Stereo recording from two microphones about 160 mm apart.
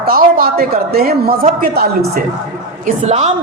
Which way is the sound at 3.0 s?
45° right (ahead or behind).